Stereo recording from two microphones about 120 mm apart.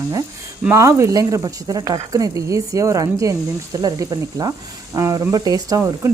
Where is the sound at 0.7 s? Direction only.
25° right (ahead or behind).